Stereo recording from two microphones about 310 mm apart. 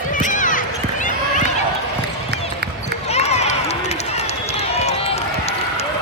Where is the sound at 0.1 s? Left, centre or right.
Left.